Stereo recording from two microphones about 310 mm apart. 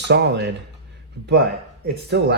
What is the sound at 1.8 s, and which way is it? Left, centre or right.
Speech, right.